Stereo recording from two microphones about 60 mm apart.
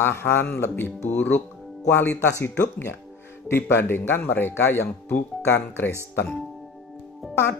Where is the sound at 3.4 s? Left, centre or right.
Left.